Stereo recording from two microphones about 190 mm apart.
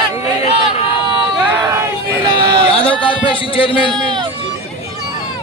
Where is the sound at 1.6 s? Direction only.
20° right (ahead or behind).